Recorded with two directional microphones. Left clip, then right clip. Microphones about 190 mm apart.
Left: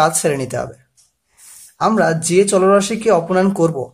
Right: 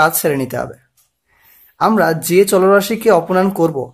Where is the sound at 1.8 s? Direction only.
15° right (ahead or behind).